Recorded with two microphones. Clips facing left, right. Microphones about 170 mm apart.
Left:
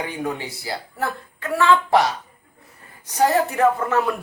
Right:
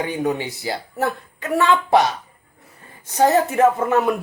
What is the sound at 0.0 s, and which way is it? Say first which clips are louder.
Speech: right 5 dB; 20° right (ahead or behind).